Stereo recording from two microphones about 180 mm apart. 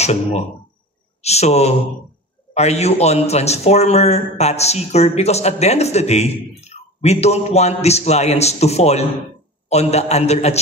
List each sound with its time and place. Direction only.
0.0 s a man's voice: 35° left (ahead or behind)